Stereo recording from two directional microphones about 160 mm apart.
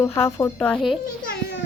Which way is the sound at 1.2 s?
75° left (ahead or behind).